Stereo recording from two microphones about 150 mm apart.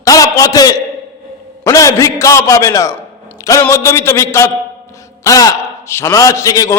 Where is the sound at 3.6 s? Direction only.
20° left (ahead or behind).